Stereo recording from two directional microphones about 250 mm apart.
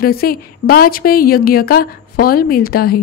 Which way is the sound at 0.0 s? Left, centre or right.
Left.